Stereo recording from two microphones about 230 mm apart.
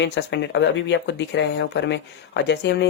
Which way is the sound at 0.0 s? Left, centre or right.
Left.